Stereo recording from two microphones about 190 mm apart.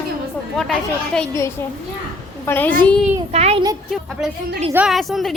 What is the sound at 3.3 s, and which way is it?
Speech, 35° right (ahead or behind).